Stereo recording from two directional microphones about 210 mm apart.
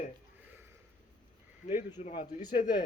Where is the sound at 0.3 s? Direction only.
10° right (ahead or behind).